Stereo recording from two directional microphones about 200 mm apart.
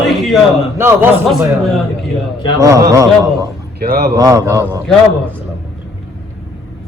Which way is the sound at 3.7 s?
55° right (ahead or behind).